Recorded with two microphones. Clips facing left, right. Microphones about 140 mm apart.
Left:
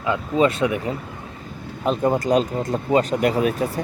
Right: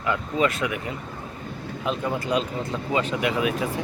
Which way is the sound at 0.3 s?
30° left (ahead or behind).